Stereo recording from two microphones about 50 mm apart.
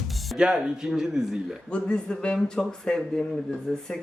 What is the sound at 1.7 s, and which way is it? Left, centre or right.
Speech, centre.